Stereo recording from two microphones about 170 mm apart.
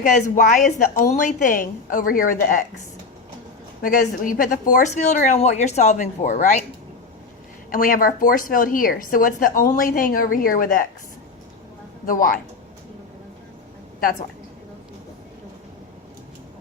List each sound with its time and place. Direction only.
0.2 s a woman's voice: 45° left (ahead or behind)
3.8 s a woman's voice: 55° left (ahead or behind)
7.7 s a woman's voice: 55° left (ahead or behind)
12.0 s a woman's voice: 55° left (ahead or behind)
14.0 s a woman's voice: 55° left (ahead or behind)